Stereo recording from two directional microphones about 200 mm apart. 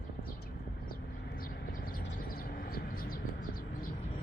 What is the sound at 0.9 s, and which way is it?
Vehicle, 45° left (ahead or behind).